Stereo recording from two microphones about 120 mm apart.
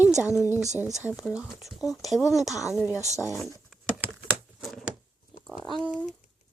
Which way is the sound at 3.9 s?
10° right (ahead or behind).